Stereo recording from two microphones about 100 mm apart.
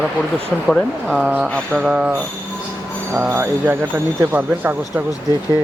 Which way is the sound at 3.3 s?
20° right (ahead or behind).